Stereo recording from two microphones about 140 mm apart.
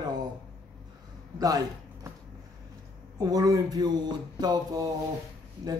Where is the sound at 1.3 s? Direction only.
25° right (ahead or behind).